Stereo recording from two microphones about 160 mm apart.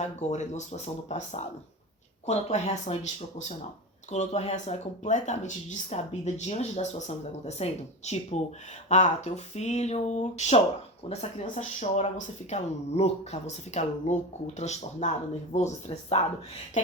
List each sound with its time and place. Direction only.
0.0 s speech: 45° left (ahead or behind)